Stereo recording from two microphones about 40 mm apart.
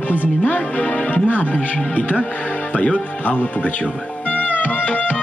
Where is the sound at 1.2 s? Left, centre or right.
Left.